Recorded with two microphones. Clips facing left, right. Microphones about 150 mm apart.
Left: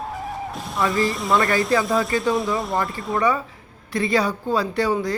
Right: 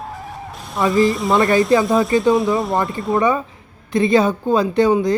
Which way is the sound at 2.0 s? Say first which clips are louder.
Right 6 dB; centre (ahead or behind).